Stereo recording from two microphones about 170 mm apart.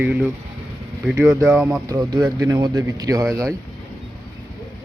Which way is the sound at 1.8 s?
25° right (ahead or behind).